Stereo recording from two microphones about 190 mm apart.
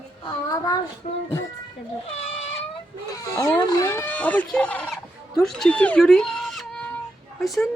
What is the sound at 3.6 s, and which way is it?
Speech, 20° left (ahead or behind).